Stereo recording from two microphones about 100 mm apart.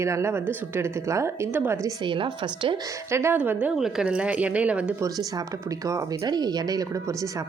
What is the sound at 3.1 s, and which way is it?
Speech, 25° right (ahead or behind).